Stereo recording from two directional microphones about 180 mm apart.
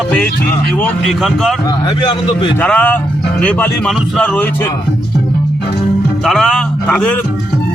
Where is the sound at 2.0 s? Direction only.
25° left (ahead or behind).